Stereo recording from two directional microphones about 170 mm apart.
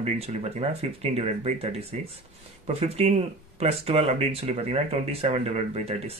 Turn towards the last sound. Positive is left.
turn(degrees=-35)  # may be behind; listen again after turning